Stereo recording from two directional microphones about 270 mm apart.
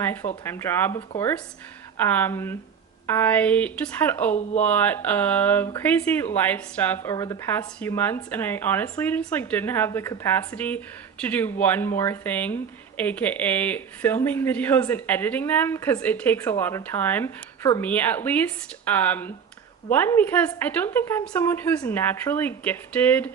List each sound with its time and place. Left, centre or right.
0.0 s a woman's voice: centre
2.0 s a woman's voice: centre
4.3 s speech: left
4.6 s a woman's voice: centre